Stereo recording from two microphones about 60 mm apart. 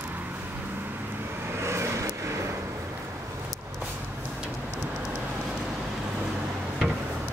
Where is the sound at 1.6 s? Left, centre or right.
Right.